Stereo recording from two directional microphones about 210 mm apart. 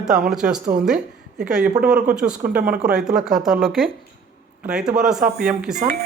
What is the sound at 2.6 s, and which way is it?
Speech, 45° right (ahead or behind).